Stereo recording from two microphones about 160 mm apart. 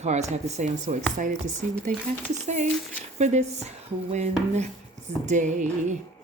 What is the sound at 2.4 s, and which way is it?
Speech, 50° right (ahead or behind).